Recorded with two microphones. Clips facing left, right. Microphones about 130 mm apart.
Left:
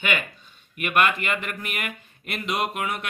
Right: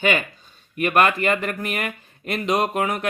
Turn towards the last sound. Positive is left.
turn(degrees=-40)  # may be behind; listen again after turning